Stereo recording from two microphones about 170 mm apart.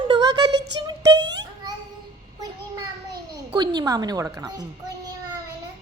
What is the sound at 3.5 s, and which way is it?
Speech, 25° right (ahead or behind).